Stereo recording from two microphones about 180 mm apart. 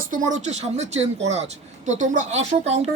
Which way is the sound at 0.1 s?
45° right (ahead or behind).